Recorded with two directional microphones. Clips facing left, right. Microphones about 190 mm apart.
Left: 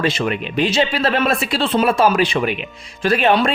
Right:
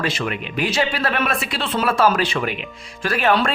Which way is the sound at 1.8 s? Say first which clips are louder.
Left 1 dB; 15° left (ahead or behind).